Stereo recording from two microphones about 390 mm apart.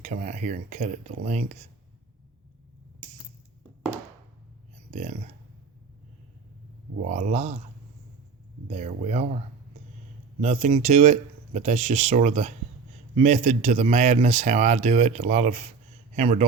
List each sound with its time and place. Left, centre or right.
0.0 s speech: centre
7.0 s speech: centre
8.6 s speech: centre
10.4 s speech: centre